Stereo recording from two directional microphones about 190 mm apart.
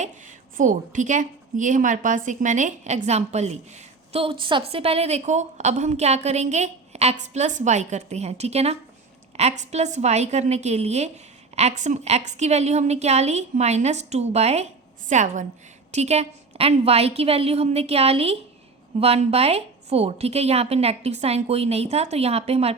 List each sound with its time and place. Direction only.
0.0 s a woman's voice: 40° right (ahead or behind)